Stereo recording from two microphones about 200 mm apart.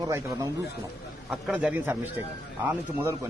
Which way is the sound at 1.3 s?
5° right (ahead or behind).